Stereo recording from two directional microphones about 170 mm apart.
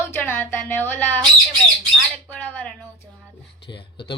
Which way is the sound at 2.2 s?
10° left (ahead or behind).